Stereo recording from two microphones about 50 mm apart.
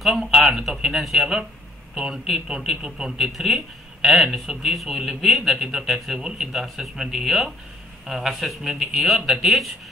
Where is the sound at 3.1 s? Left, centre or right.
Centre.